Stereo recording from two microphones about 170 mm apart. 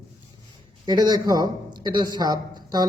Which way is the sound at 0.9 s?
25° right (ahead or behind).